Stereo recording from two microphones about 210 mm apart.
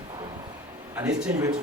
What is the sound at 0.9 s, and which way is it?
Speech, 10° right (ahead or behind).